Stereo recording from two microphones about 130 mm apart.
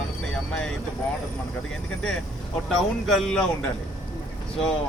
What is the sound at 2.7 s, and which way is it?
Speech, 5° left (ahead or behind).